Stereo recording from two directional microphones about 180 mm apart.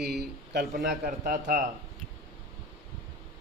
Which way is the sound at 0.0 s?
65° right (ahead or behind).